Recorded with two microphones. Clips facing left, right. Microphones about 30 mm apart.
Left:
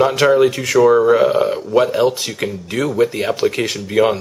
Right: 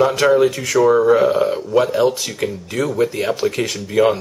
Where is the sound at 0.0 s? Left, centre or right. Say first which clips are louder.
Left 1 dB; centre.